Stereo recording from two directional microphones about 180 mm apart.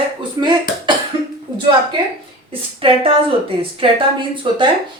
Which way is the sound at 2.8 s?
30° right (ahead or behind).